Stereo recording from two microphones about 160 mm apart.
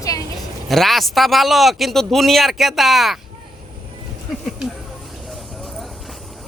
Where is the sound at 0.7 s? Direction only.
Centre (ahead or behind).